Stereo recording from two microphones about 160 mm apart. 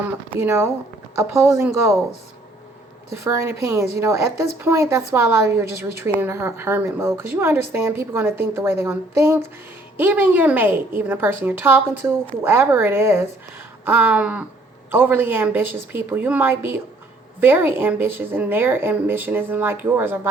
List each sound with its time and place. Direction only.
0.3 s a woman's voice: 15° right (ahead or behind)
3.2 s a woman's voice: 15° right (ahead or behind)